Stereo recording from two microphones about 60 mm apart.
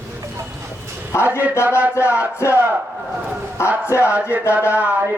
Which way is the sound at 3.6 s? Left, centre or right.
Left.